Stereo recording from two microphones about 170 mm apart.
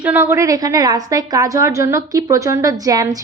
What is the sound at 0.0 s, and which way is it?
A woman's voice, 10° right (ahead or behind).